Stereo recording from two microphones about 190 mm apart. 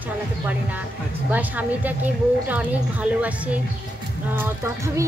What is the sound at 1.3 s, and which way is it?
Speech, 10° right (ahead or behind).